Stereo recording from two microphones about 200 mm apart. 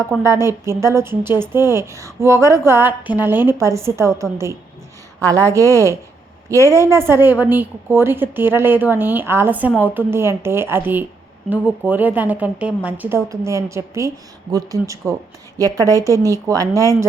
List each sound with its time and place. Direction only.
0.2 s a woman's voice: 15° right (ahead or behind)
6.6 s a woman's voice: 15° left (ahead or behind)
6.8 s a woman's voice: 10° right (ahead or behind)